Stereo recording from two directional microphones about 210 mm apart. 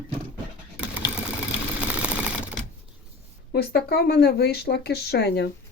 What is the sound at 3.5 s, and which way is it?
Speech, 50° left (ahead or behind).